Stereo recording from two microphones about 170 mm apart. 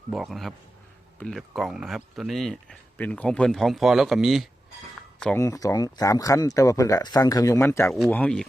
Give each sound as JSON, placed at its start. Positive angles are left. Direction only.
{"t": 0.1, "sound": "speech", "side_deg": 0}
{"t": 5.2, "sound": "speech", "side_deg": 15}